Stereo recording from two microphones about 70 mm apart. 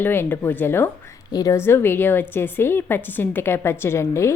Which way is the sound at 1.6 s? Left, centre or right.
Left.